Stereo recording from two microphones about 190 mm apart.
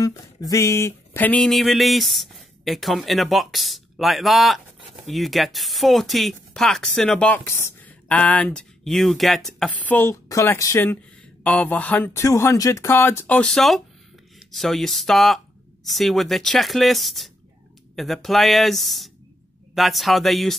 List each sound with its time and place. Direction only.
0.0 s speech: 15° left (ahead or behind); by 20.5 s centre (ahead or behind)